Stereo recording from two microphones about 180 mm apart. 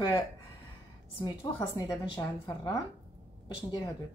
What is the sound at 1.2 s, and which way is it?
A woman's voice, 25° left (ahead or behind).